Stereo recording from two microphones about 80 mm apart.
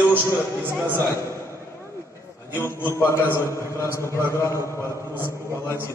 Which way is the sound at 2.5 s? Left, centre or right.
Left.